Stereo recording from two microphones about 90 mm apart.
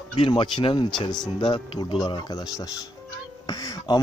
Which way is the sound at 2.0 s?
50° left (ahead or behind).